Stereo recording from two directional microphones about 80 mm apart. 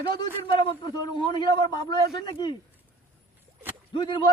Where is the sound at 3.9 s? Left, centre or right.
Left.